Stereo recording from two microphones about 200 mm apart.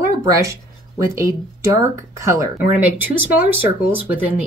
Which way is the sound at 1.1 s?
15° right (ahead or behind).